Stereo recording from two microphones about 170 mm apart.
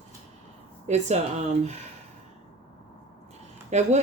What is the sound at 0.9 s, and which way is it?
Speech, 40° right (ahead or behind).